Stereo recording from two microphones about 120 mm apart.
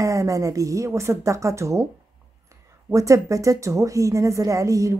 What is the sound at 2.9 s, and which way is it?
Speech, 25° right (ahead or behind).